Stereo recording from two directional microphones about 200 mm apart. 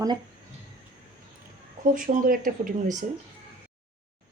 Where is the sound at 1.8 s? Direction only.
40° right (ahead or behind).